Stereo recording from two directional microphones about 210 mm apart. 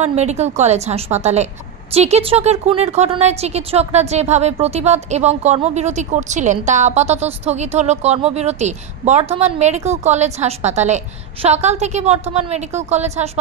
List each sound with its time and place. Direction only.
0.0 s speech: 30° right (ahead or behind)